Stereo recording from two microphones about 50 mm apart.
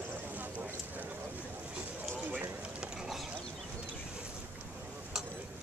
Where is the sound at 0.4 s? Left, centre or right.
Right.